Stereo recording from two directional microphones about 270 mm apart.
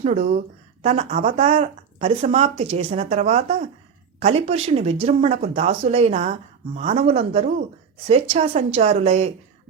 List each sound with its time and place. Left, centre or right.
0.0 s speech: right